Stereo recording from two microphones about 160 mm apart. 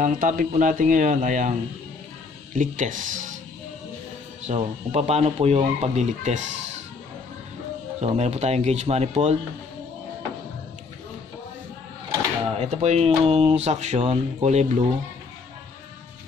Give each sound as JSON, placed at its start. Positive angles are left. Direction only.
{"t": 0.0, "sound": "speech", "side_deg": -55}
{"t": 2.5, "sound": "speech", "side_deg": -55}
{"t": 4.5, "sound": "speech", "side_deg": -40}
{"t": 8.0, "sound": "speech", "side_deg": -45}
{"t": 12.5, "sound": "speech", "side_deg": -40}